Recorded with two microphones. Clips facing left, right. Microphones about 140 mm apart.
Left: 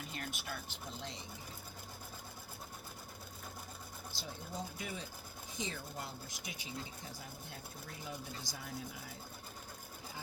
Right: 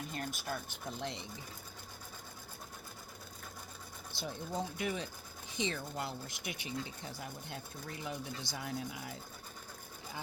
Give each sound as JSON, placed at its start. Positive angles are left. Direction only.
{"t": 0.1, "sound": "speech", "side_deg": -40}
{"t": 4.2, "sound": "speech", "side_deg": -70}